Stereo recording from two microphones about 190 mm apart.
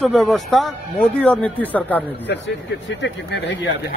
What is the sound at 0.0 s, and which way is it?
Speech, centre (ahead or behind).